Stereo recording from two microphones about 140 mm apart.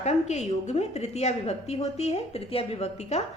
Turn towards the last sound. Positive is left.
turn(degrees=50)  # may be behind; listen again after turning